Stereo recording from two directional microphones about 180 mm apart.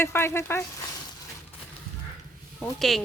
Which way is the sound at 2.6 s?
Centre (ahead or behind).